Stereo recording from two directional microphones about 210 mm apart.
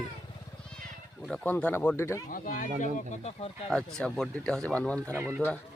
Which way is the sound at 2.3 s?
40° left (ahead or behind).